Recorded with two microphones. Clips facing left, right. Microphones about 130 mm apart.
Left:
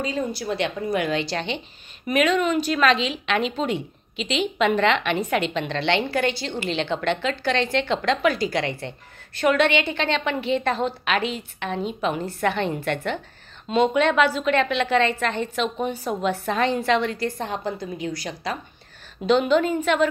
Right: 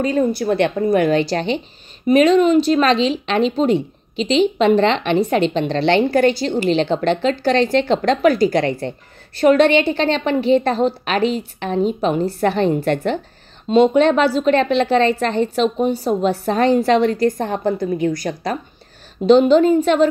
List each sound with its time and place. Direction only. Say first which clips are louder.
0.0 s a woman's voice: right 9 dB; 55° right (ahead or behind)
2.0 s speech: right 8 dB; 30° right (ahead or behind); by 18.6 s 45° right (ahead or behind)
19.2 s speech: right 8 dB; 35° right (ahead or behind)